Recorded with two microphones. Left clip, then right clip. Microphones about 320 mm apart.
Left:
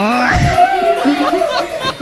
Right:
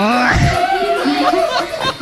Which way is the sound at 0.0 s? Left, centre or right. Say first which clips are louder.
Even; centre.